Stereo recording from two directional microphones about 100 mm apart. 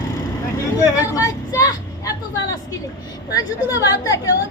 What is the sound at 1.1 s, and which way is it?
Vehicle, 35° left (ahead or behind).